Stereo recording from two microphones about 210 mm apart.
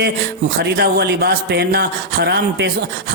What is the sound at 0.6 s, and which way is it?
A man's voice, 50° right (ahead or behind).